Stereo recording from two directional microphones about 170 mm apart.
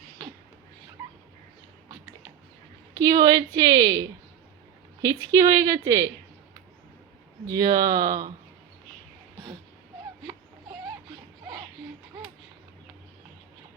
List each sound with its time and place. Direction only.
2.9 s a woman's voice: 20° right (ahead or behind)
5.0 s a woman's voice: 20° right (ahead or behind)
7.4 s a woman's voice: 20° right (ahead or behind)